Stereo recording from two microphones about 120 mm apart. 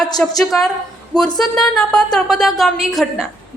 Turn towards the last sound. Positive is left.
turn(degrees=0)  # may be behind; listen again after turning